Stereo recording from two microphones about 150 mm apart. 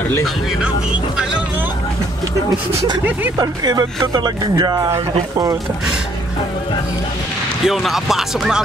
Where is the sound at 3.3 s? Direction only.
25° right (ahead or behind).